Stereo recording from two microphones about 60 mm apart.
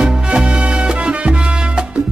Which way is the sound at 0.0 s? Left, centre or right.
Centre.